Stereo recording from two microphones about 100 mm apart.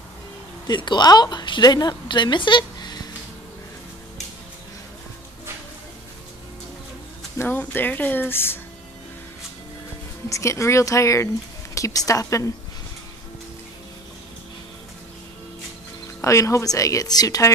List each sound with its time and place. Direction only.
0.7 s a woman's voice: 50° left (ahead or behind)
7.3 s speech: 20° left (ahead or behind)
10.3 s speech: 30° left (ahead or behind)
16.2 s speech: 30° left (ahead or behind)